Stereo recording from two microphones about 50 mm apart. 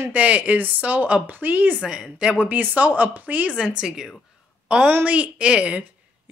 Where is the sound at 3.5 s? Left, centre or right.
Centre.